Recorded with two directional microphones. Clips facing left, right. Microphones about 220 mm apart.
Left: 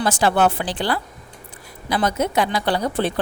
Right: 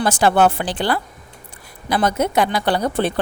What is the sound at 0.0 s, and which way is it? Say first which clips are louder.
A woman's voice: right 3 dB; 55° right (ahead or behind).